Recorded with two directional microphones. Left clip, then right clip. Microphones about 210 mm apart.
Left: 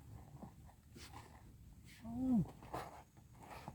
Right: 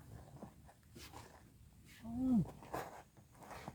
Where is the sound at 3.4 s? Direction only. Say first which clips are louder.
Right 2 dB; 15° right (ahead or behind).